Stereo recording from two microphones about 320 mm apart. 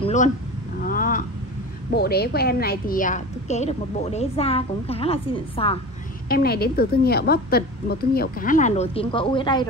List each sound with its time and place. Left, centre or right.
0.0 s a sound: left
1.9 s a woman's voice: left
6.2 s a woman's voice: left